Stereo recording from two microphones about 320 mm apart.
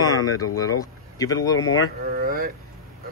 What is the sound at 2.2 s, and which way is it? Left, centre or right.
Speech, right.